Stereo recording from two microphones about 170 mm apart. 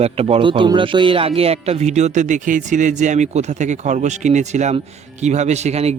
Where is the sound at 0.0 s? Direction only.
35° right (ahead or behind).